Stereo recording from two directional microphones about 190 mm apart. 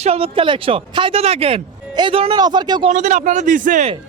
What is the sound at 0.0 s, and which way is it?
Speech, 30° right (ahead or behind).